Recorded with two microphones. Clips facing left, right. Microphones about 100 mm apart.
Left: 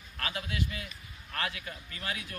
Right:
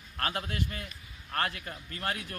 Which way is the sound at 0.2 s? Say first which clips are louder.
Right 2 dB; 50° right (ahead or behind).